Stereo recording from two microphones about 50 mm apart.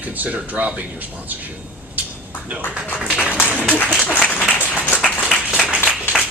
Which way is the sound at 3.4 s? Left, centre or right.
Left.